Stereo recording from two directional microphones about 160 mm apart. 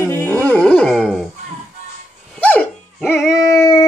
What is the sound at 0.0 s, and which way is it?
Dog, 15° left (ahead or behind).